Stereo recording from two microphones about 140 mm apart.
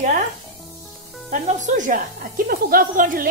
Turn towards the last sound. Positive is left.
turn(degrees=-85)